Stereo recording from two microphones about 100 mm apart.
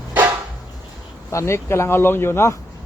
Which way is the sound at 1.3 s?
30° left (ahead or behind).